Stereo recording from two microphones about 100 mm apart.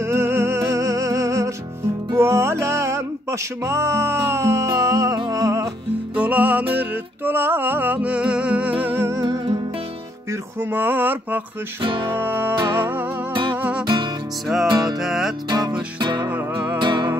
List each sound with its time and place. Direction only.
0.0 s music: 25° right (ahead or behind)
6.1 s music: 15° right (ahead or behind); by 9.4 s 30° right (ahead or behind)
10.6 s mantra: 20° right (ahead or behind)
11.8 s music: 55° right (ahead or behind)
12.1 s mantra: 20° right (ahead or behind)
13.3 s music: 55° right (ahead or behind)
13.6 s music: 15° right (ahead or behind)
14.7 s music: 40° right (ahead or behind)
15.0 s music: 5° right (ahead or behind)
15.5 s music: 45° right (ahead or behind)